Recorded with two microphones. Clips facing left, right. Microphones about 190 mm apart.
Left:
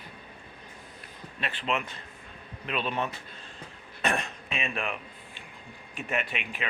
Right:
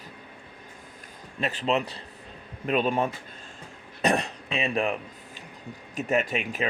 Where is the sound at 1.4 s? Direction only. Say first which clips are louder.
Right 6 dB; 40° right (ahead or behind).